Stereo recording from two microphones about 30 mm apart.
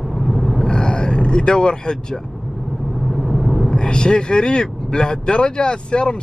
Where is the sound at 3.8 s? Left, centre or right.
Left.